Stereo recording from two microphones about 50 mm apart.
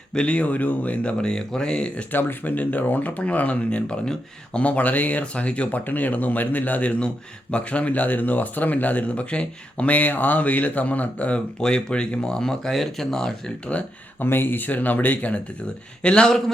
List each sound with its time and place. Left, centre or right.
0.1 s speech: left
1.2 s speech: centre
2.1 s speech: left; by 4.6 s centre
4.6 s speech: left; by 13.3 s centre
14.2 s speech: left
16.0 s speech: centre